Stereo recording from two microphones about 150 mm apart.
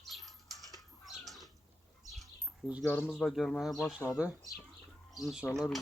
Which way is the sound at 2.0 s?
Centre (ahead or behind).